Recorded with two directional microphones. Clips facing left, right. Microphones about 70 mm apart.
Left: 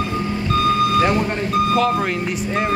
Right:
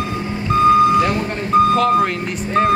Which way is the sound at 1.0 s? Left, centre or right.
Left.